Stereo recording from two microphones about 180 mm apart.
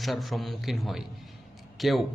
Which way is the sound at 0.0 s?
Centre (ahead or behind).